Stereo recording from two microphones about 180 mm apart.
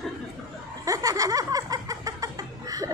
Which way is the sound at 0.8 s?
20° right (ahead or behind).